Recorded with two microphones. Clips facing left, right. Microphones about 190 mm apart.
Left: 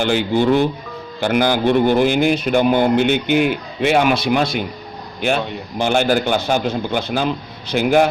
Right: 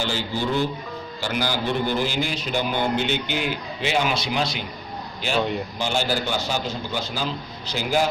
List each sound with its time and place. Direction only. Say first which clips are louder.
0.0 s a man's voice: left 10 dB; 60° left (ahead or behind)
5.8 s a man's voice: left 9 dB; 55° left (ahead or behind)